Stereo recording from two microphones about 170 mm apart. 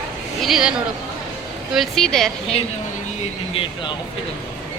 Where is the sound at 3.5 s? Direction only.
30° left (ahead or behind).